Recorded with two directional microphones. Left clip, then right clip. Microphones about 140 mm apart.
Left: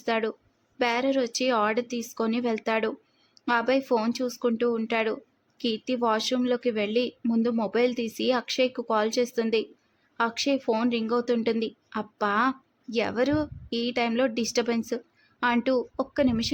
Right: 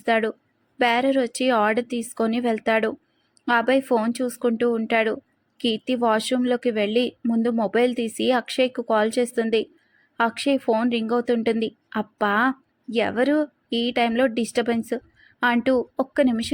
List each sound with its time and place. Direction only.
0.0 s a woman's voice: 15° right (ahead or behind)